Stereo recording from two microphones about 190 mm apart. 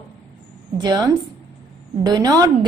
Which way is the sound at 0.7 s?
20° right (ahead or behind).